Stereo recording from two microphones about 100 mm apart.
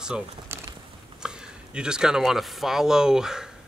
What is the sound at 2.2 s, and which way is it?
Speech, centre (ahead or behind).